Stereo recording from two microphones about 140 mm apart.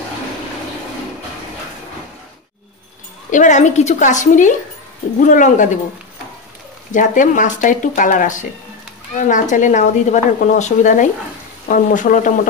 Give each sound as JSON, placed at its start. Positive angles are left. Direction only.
{"t": 3.3, "sound": "speech", "side_deg": 60}
{"t": 6.9, "sound": "speech", "side_deg": 70}